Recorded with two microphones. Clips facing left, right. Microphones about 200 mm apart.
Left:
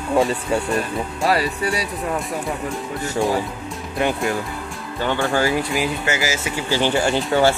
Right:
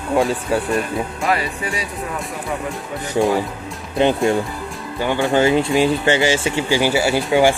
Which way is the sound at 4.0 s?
25° right (ahead or behind).